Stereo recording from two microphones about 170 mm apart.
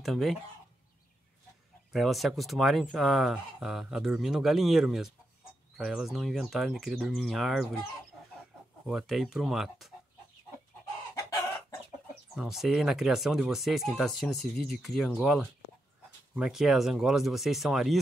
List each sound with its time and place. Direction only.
0.0 s speech: centre (ahead or behind)
1.9 s speech: centre (ahead or behind)
8.8 s speech: centre (ahead or behind)
11.1 s chicken: 20° left (ahead or behind)
12.4 s speech: centre (ahead or behind)